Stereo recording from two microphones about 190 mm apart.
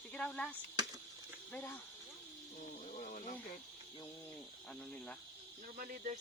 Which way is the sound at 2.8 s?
40° left (ahead or behind).